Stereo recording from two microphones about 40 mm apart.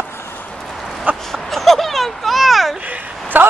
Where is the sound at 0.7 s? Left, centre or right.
Centre.